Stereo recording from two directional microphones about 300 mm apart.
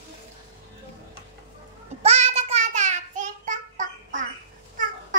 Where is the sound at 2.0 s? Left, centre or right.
Right.